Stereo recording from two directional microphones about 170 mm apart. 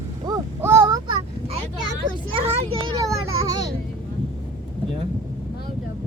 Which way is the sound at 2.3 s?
30° right (ahead or behind).